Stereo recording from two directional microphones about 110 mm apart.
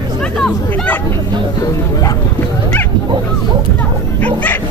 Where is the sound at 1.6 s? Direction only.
35° left (ahead or behind).